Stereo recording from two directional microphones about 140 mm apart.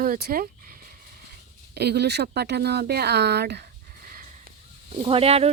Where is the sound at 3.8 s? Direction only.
90° right; by 4.4 s 65° right (ahead or behind).